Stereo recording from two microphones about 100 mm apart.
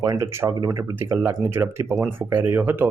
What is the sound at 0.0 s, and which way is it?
Speech, 35° right (ahead or behind).